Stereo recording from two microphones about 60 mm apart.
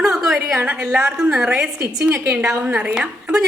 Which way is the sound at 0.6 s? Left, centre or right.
Right.